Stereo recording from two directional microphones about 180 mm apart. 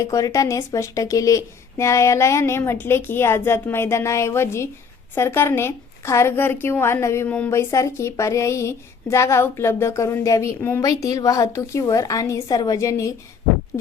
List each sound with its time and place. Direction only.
0.0 s a woman's voice: 15° left (ahead or behind)